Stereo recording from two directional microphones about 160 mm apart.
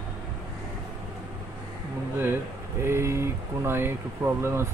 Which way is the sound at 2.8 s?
15° right (ahead or behind).